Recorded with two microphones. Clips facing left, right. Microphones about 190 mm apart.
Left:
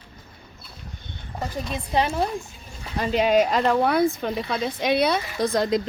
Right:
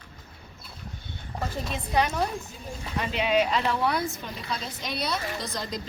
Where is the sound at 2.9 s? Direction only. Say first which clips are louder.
Left 6 dB; 40° left (ahead or behind).